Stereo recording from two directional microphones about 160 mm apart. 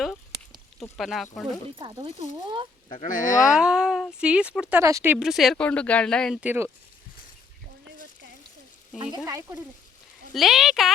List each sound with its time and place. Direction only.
0.8 s speech: centre (ahead or behind)
1.7 s speech: 25° right (ahead or behind)
3.0 s speech: 55° left (ahead or behind)
3.4 s speech: 5° right (ahead or behind)
4.8 s speech: 20° right (ahead or behind)
5.2 s speech: centre (ahead or behind)
6.4 s speech: 10° right (ahead or behind)
9.2 s speech: 20° right (ahead or behind)
10.3 s speech: centre (ahead or behind)